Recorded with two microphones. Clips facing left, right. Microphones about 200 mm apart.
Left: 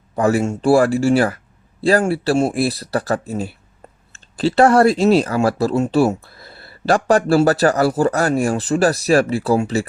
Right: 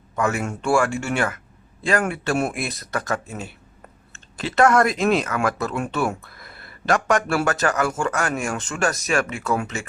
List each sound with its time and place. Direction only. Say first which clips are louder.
0.2 s speech: left 7 dB; 35° left (ahead or behind)